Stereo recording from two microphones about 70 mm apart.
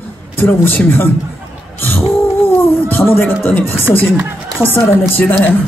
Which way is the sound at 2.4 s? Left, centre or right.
Left.